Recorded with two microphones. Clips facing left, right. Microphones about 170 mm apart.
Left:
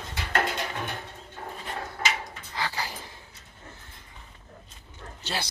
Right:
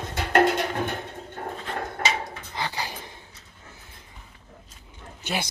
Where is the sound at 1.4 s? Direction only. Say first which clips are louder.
Right 5 dB; 55° right (ahead or behind).